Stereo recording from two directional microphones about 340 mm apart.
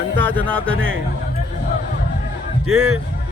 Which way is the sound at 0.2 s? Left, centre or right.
Centre.